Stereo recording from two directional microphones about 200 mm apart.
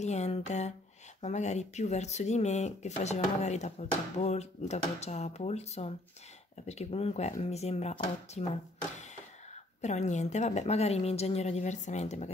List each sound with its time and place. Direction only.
0.0 s speech: 35° left (ahead or behind)